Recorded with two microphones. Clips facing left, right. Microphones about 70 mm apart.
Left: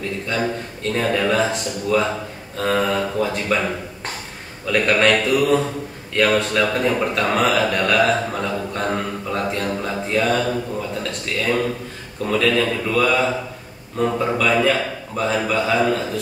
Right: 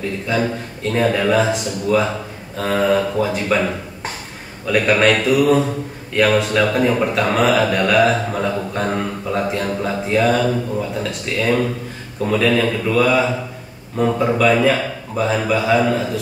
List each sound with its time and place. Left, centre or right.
0.3 s a man's voice: centre